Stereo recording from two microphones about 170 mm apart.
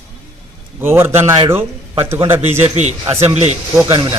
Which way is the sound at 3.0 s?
15° right (ahead or behind).